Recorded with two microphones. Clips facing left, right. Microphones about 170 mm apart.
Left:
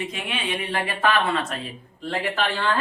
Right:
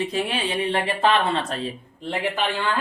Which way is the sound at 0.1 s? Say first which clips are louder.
Right 4 dB; 35° right (ahead or behind).